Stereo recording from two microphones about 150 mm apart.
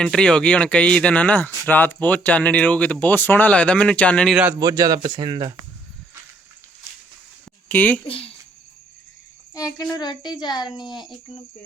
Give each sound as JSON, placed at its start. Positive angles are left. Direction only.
{"t": 0.0, "sound": "speech", "side_deg": 5}
{"t": 4.6, "sound": "speech", "side_deg": -25}
{"t": 7.7, "sound": "speech", "side_deg": 10}
{"t": 8.0, "sound": "speech", "side_deg": 40}
{"t": 9.6, "sound": "a woman's voice", "side_deg": 20}